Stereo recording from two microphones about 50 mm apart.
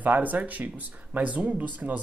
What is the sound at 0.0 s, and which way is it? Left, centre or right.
Speech, right.